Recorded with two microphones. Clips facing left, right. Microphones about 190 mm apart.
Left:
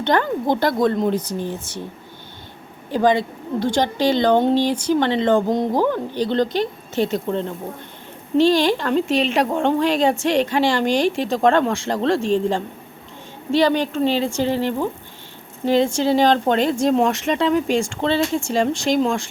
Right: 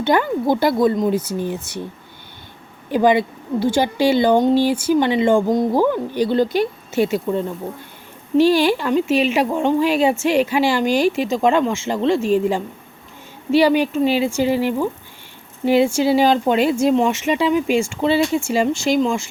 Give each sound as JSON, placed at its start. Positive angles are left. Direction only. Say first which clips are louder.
{"t": 0.0, "sound": "speech", "louder": "right 2 dB", "side_deg": -10}
{"t": 2.9, "sound": "speech", "louder": "right 2 dB", "side_deg": -10}